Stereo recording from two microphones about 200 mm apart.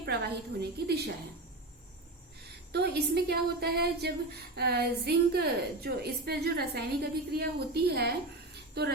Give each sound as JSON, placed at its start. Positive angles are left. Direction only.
{"t": 0.0, "sound": "a woman's voice", "side_deg": -55}
{"t": 2.7, "sound": "a woman's voice", "side_deg": -55}